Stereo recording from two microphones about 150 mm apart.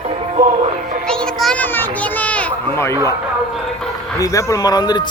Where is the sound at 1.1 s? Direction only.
5° left (ahead or behind).